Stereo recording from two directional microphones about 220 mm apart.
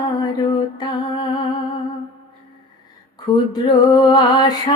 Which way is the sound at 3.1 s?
20° left (ahead or behind).